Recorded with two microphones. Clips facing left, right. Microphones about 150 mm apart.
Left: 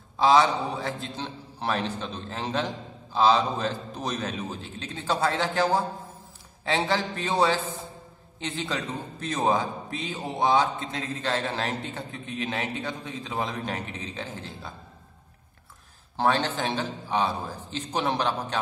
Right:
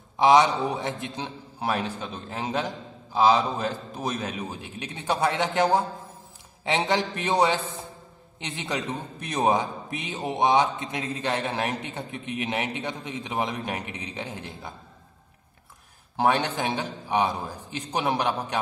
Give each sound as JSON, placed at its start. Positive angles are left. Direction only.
{"t": 0.2, "sound": "a man's voice", "side_deg": -20}
{"t": 16.2, "sound": "a man's voice", "side_deg": -15}